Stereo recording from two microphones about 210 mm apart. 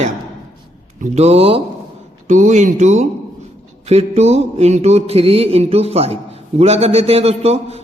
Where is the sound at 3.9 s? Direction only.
30° right (ahead or behind).